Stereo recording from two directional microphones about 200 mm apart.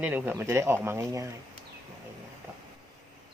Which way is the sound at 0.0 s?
10° right (ahead or behind).